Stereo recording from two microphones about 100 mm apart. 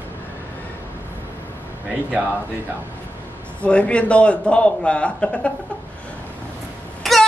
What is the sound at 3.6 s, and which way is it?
A man's voice, 10° left (ahead or behind).